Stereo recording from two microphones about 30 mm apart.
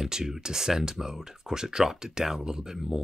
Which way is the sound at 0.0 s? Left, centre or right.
Centre.